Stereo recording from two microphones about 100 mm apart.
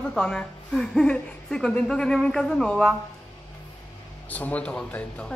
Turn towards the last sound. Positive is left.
turn(degrees=10)  # may be behind; listen again after turning